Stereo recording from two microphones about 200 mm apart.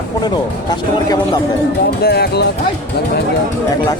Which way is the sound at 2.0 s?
50° left (ahead or behind).